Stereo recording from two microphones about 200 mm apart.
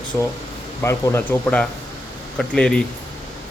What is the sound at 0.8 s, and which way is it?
Speech, 15° left (ahead or behind).